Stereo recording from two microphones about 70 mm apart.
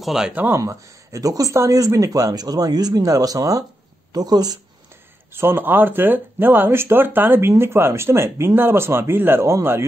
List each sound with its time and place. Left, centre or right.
0.0 s speech: centre
0.3 s speech: right
0.6 s speech: right
4.1 s speech: right
5.3 s speech: right